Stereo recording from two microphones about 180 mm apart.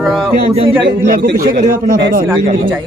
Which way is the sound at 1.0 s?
50° right (ahead or behind).